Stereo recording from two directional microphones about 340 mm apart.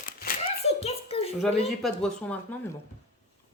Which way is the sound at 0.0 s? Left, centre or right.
Left.